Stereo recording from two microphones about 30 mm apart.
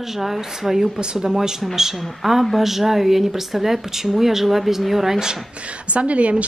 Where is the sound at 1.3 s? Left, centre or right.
Centre.